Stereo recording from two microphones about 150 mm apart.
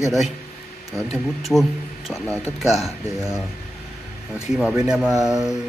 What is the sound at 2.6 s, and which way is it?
Speech, centre (ahead or behind).